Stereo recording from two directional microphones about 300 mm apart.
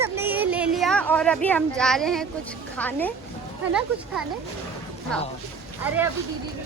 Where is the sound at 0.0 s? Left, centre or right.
Centre.